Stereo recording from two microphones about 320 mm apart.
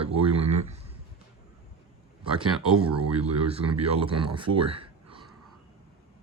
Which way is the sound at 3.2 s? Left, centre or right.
Centre.